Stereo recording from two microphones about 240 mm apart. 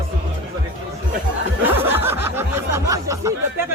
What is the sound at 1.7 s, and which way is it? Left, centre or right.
Speech, centre.